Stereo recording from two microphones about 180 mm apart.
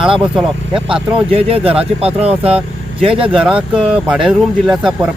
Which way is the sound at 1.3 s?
30° right (ahead or behind).